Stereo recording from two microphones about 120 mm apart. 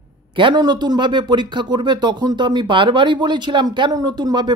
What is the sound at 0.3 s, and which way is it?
Speech, 45° right (ahead or behind).